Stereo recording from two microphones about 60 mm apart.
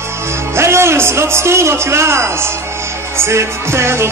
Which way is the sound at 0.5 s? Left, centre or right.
Right.